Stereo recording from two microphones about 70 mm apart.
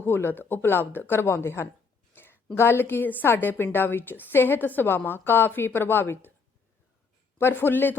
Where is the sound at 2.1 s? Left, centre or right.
Left.